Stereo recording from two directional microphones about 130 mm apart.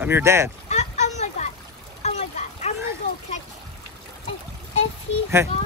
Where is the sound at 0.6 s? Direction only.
60° left (ahead or behind).